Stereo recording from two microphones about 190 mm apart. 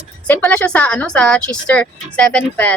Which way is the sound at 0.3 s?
10° left (ahead or behind).